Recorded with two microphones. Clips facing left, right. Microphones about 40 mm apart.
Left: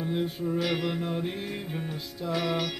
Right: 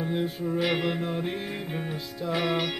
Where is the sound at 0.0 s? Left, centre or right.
Centre.